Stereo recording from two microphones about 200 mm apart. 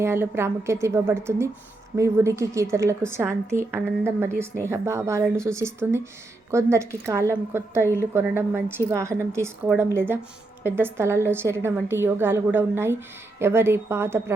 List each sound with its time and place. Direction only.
0.0 s a woman's voice: 10° right (ahead or behind)